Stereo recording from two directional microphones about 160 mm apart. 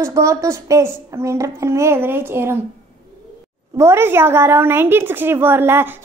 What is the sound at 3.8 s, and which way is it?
A child's voice, 15° right (ahead or behind).